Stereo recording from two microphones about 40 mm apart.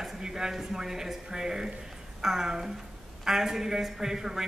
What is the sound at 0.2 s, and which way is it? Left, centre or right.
Speech, centre.